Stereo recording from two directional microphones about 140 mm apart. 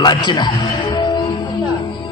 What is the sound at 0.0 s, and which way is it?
Speech, 30° left (ahead or behind).